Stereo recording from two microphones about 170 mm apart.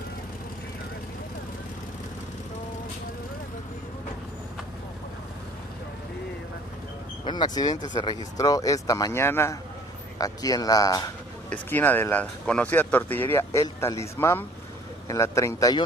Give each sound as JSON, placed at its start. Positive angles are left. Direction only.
{"t": 7.2, "sound": "speech", "side_deg": 25}
{"t": 11.5, "sound": "speech", "side_deg": 10}